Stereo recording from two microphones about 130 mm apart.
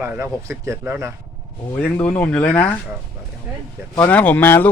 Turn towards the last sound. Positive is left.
turn(degrees=15)  # may be behind; listen again after turning